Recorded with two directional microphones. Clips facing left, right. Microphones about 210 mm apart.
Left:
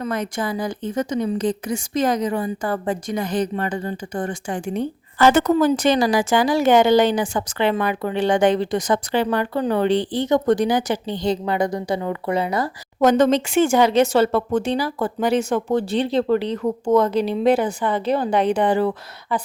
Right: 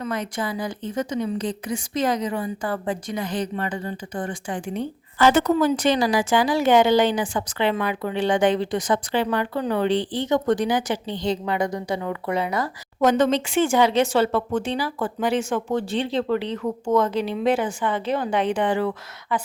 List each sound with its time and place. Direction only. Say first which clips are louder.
0.0 s speech: left 3 dB; 45° left (ahead or behind)